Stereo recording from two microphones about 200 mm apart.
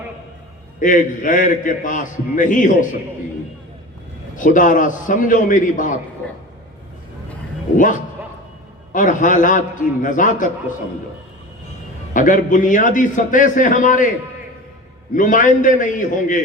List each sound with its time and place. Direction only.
0.8 s a man's voice: 40° left (ahead or behind)
4.4 s a man's voice: 40° left (ahead or behind)
8.9 s a man's voice: 40° left (ahead or behind)
12.1 s a man's voice: 40° left (ahead or behind)
15.1 s a man's voice: 40° left (ahead or behind)